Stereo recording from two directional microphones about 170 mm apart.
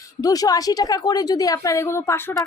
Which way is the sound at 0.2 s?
20° left (ahead or behind).